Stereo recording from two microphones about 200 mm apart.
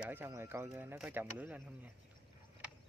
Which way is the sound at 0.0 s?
10° right (ahead or behind).